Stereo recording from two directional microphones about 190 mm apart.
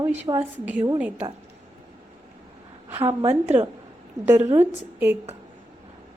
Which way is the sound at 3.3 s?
30° right (ahead or behind).